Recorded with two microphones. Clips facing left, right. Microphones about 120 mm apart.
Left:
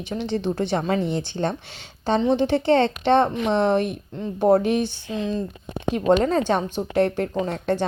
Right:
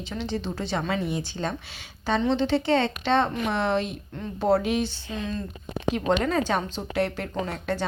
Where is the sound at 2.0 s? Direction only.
20° left (ahead or behind).